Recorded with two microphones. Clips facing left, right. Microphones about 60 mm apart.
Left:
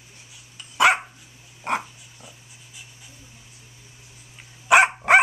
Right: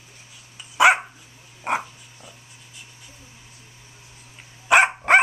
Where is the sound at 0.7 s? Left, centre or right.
Centre.